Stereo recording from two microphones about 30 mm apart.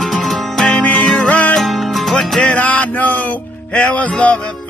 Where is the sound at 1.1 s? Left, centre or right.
Left.